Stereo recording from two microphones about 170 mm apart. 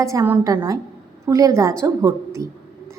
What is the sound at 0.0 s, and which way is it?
A woman's voice, 20° right (ahead or behind).